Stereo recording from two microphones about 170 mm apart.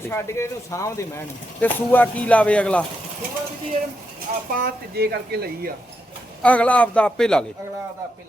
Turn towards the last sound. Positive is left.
turn(degrees=5)  # may be behind; listen again after turning